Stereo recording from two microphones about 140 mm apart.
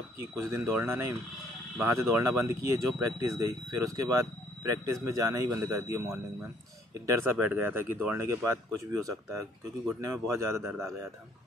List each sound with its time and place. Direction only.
0.4 s speech: 20° right (ahead or behind)
9.9 s speech: 20° right (ahead or behind)